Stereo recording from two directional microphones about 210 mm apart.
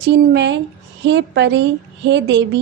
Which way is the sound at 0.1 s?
55° right (ahead or behind).